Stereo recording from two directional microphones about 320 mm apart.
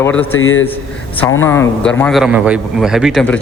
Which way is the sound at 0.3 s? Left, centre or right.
Left.